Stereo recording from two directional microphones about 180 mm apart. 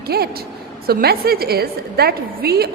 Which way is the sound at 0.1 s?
60° right (ahead or behind).